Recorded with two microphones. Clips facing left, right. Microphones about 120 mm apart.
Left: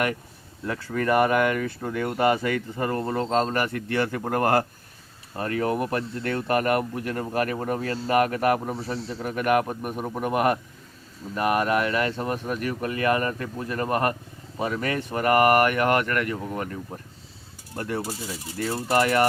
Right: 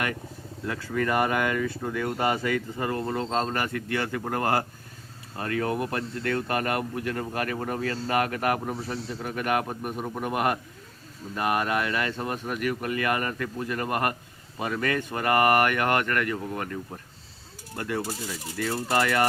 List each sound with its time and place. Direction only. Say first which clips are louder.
0.7 s a man's voice: left 3 dB; 40° left (ahead or behind)
5.4 s speech: left 2 dB; 30° left (ahead or behind)
9.2 s a man's voice: left 5 dB; 45° left (ahead or behind)
9.6 s a man's voice: left 2 dB; 10° left (ahead or behind)
10.2 s speech: left 4 dB; 35° left (ahead or behind)
17.7 s speech: left 1 dB; 35° left (ahead or behind)